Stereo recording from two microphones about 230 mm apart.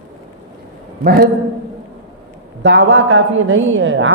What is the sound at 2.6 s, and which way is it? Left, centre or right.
Speech, right.